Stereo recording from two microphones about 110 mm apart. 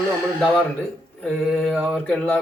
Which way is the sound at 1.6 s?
10° left (ahead or behind).